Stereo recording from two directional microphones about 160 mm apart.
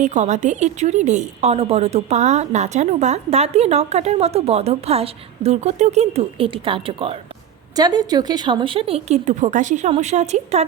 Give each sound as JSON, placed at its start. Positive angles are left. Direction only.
{"t": 0.0, "sound": "a woman's voice", "side_deg": -45}
{"t": 7.8, "sound": "a woman's voice", "side_deg": -25}